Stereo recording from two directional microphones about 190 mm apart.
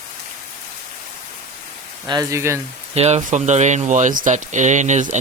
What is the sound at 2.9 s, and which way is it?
Speech, 35° right (ahead or behind).